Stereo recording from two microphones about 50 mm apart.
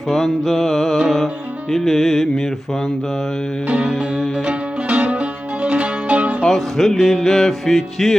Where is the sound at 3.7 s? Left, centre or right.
Right.